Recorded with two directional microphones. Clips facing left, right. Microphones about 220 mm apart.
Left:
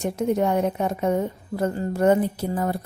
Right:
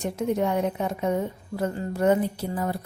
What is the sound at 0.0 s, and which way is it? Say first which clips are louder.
A woman's voice: left 3 dB; 45° left (ahead or behind).